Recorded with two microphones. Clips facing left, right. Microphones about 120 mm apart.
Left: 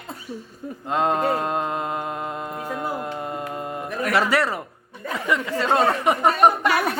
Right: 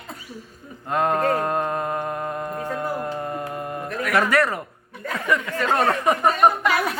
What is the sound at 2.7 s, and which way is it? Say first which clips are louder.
Music: even; 20° left (ahead or behind).